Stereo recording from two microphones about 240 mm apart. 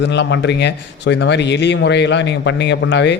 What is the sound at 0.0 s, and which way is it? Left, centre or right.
A man's voice, left.